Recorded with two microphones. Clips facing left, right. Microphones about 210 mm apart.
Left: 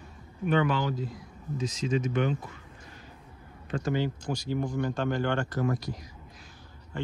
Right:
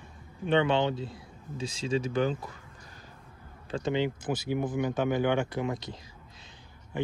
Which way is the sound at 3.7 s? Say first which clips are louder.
Even; 20° right (ahead or behind).